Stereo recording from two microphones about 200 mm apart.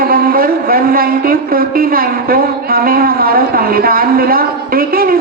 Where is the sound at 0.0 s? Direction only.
45° right (ahead or behind).